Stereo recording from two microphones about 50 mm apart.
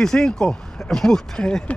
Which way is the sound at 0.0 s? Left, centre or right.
Centre.